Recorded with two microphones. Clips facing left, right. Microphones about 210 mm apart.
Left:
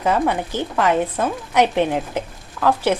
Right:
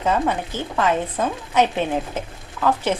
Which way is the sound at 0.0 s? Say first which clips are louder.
Left 2 dB; 10° left (ahead or behind).